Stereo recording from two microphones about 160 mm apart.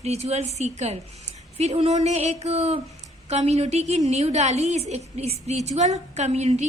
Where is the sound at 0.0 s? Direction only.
40° right (ahead or behind).